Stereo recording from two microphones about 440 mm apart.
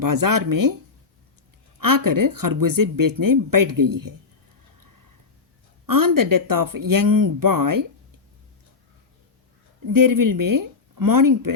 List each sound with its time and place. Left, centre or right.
0.0 s speech: right
1.8 s speech: right
5.8 s speech: right
9.8 s speech: right